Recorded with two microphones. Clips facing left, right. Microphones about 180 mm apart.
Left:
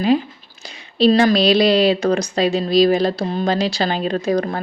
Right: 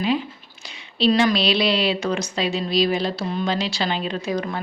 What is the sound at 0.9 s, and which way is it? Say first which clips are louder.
Speech: left 5 dB; 40° left (ahead or behind).